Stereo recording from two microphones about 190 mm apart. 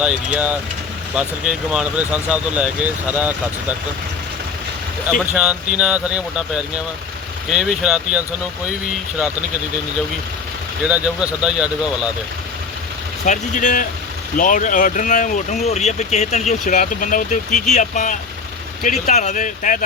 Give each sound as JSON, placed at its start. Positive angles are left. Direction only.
{"t": 0.0, "sound": "speech", "side_deg": -5}
{"t": 5.3, "sound": "speech", "side_deg": -5}
{"t": 10.8, "sound": "speech", "side_deg": -5}
{"t": 13.2, "sound": "speech", "side_deg": 40}